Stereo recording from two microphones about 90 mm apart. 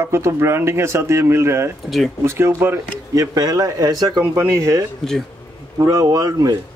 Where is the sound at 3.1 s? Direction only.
45° right (ahead or behind).